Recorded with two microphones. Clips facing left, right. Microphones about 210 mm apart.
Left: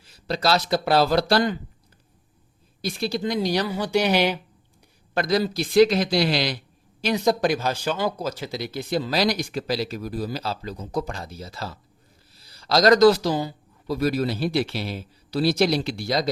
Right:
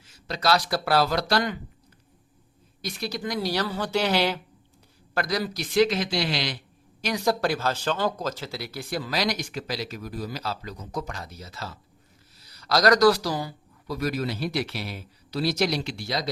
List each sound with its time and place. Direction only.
0.0 s speech: 35° left (ahead or behind)
2.8 s speech: 30° left (ahead or behind)
7.0 s speech: 20° left (ahead or behind); by 16.3 s 40° left (ahead or behind)